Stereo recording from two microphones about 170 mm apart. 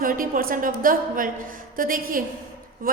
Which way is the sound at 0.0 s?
55° right (ahead or behind).